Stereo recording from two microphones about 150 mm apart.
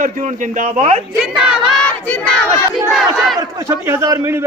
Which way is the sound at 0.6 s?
50° right (ahead or behind).